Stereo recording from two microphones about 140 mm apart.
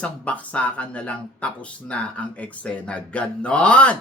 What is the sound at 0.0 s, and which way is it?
Speech, 10° left (ahead or behind).